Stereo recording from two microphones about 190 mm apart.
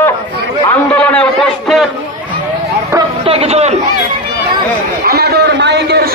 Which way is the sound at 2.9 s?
25° right (ahead or behind).